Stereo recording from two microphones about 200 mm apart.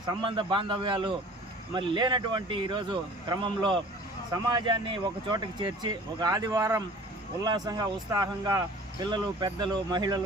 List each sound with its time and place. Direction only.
0.1 s speech: 25° right (ahead or behind)